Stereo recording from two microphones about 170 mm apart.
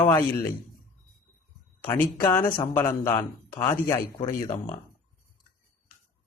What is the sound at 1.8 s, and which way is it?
A man's voice, 10° left (ahead or behind).